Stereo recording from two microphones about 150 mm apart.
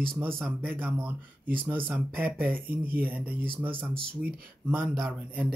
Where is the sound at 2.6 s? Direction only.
75° right (ahead or behind).